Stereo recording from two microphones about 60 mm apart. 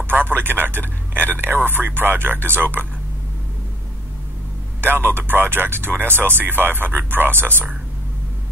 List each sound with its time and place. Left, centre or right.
0.0 s speech: right
5.1 s speech: right